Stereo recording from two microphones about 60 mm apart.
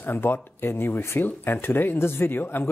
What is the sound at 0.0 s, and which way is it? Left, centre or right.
Speech, left.